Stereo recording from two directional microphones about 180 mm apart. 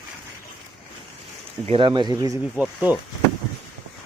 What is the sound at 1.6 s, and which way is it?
Speech, 30° right (ahead or behind).